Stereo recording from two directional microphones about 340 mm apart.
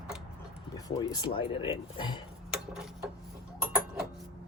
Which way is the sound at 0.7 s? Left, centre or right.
Centre.